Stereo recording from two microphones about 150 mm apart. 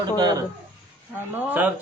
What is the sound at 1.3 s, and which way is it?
Speech, 10° right (ahead or behind).